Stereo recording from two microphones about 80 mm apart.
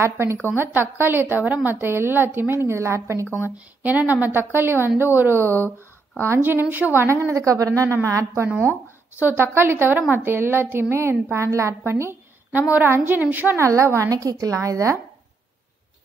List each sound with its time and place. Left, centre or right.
0.0 s a woman's voice: right
3.4 s a woman's voice: centre
7.2 s a woman's voice: right
9.2 s a woman's voice: right
13.6 s a woman's voice: right